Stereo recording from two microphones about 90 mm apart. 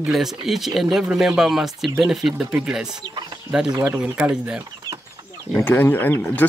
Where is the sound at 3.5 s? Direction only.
10° right (ahead or behind).